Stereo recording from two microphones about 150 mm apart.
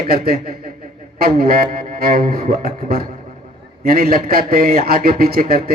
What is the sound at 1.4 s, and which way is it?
A man's voice, 80° right.